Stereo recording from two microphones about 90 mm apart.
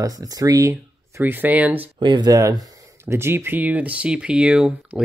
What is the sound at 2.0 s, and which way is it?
Speech, 55° right (ahead or behind).